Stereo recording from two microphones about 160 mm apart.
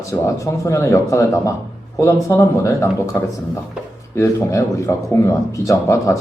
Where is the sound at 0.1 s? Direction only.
20° left (ahead or behind).